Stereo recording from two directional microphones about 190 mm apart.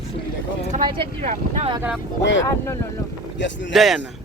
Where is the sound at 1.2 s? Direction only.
40° right (ahead or behind).